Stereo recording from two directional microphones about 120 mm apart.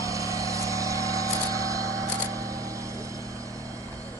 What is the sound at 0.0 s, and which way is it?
Vehicle, 25° right (ahead or behind).